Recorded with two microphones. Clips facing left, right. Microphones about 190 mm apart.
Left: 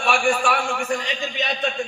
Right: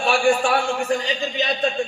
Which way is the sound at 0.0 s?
25° right (ahead or behind).